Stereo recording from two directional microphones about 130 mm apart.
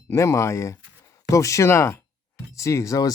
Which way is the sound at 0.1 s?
20° left (ahead or behind).